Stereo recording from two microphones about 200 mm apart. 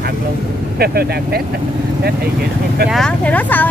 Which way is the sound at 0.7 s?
50° right (ahead or behind).